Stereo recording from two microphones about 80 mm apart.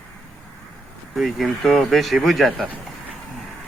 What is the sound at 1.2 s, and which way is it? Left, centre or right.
A man's voice, centre.